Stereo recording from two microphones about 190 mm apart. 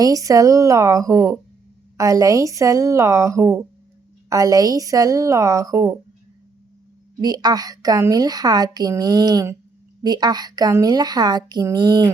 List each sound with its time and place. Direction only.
0.0 s speech: 20° right (ahead or behind)
7.2 s a woman's voice: 20° right (ahead or behind)